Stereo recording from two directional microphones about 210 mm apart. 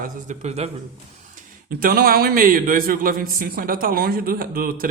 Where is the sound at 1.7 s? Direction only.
45° right (ahead or behind).